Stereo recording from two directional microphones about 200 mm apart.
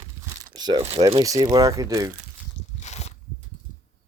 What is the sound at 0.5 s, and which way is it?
Crumpling, 20° right (ahead or behind).